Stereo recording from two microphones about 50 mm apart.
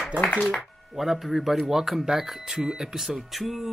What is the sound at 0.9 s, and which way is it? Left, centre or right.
Speech, centre.